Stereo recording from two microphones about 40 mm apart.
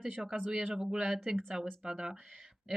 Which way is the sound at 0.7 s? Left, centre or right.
Centre.